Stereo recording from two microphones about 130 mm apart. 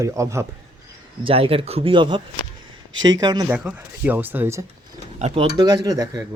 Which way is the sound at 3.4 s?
10° right (ahead or behind).